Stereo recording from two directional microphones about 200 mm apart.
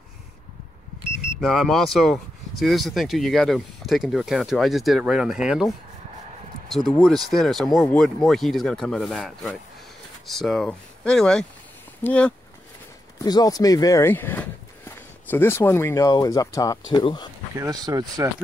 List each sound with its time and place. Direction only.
1.4 s speech: centre (ahead or behind)
13.2 s speech: 20° left (ahead or behind)
17.6 s speech: 20° right (ahead or behind)